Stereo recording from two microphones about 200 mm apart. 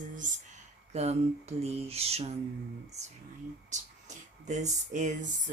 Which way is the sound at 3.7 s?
35° right (ahead or behind).